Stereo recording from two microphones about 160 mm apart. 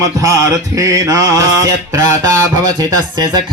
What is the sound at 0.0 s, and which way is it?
Mantra, 20° right (ahead or behind).